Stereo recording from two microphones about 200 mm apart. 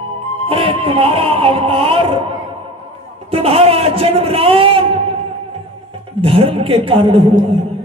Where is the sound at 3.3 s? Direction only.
30° right (ahead or behind).